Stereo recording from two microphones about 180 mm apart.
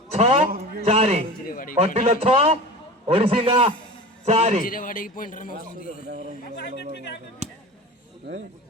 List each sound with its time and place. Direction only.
0.1 s a sound: 35° right (ahead or behind)
0.8 s a man's voice: 35° right (ahead or behind)
1.5 s speech: 50° left (ahead or behind)
1.8 s a man's voice: 35° right (ahead or behind)
4.6 s a man's voice: 50° left (ahead or behind)